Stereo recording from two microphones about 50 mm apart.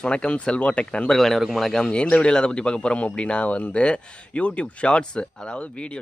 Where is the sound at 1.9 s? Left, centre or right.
Left.